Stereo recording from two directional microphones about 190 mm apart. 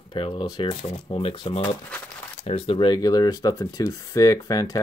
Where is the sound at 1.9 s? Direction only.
5° left (ahead or behind).